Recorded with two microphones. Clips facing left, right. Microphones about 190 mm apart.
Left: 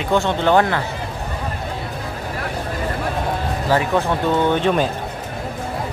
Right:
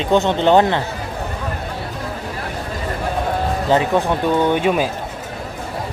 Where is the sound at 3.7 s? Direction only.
20° right (ahead or behind).